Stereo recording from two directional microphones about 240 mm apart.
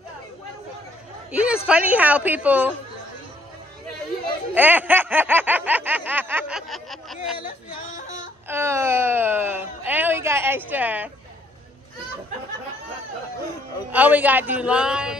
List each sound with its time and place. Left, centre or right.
1.3 s speech: centre
4.6 s snicker: centre
7.4 s yodeling: left
8.5 s speech: centre
13.9 s speech: centre